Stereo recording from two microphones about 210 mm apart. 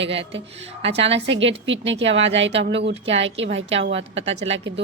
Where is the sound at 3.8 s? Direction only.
60° right (ahead or behind).